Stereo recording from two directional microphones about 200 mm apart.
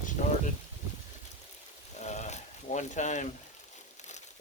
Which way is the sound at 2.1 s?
35° left (ahead or behind).